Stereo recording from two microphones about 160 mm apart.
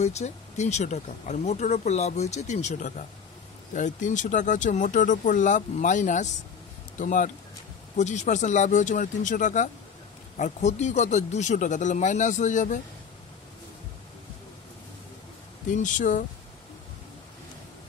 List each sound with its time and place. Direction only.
0.0 s speech: 45° left (ahead or behind)
15.7 s speech: 55° left (ahead or behind)